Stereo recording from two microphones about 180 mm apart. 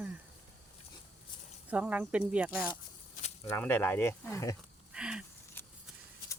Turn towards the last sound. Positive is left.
turn(degrees=-5)  # may be behind; listen again after turning